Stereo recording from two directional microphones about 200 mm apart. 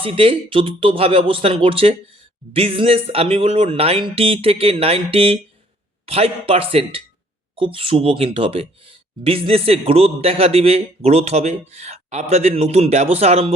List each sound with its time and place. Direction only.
0.0 s speech: 25° right (ahead or behind)